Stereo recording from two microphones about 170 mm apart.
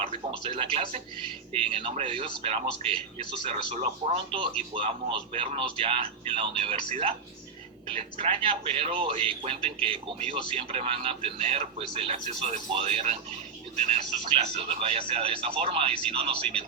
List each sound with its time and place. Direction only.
0.0 s speech: 35° right (ahead or behind)
7.9 s speech: 30° right (ahead or behind)